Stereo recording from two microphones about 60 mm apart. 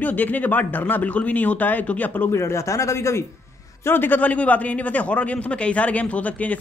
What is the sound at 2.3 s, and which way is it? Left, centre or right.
Speech, left.